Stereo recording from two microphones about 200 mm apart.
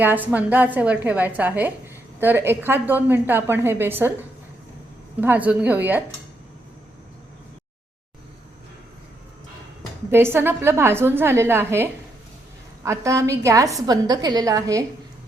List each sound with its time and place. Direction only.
0.0 s a woman's voice: 10° right (ahead or behind)
10.1 s a woman's voice: 10° right (ahead or behind)